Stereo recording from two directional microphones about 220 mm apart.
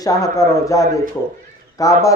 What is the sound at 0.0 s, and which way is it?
Speech, 15° left (ahead or behind).